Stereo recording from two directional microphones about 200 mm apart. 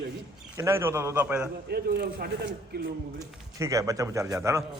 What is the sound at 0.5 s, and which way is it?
Speech, 10° right (ahead or behind).